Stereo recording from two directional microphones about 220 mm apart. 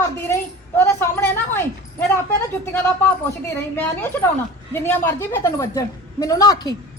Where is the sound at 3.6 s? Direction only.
10° left (ahead or behind).